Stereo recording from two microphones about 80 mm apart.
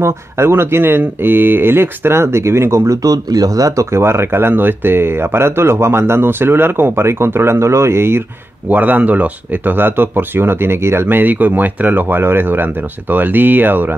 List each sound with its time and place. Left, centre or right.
0.0 s speech: right
3.9 s speech: right
8.6 s speech: right